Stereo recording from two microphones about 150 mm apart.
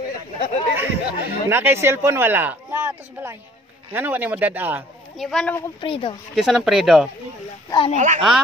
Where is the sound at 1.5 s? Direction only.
15° right (ahead or behind).